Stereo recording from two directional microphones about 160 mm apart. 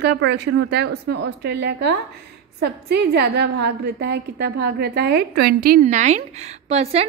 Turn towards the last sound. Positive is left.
turn(degrees=-40)  # may be behind; listen again after turning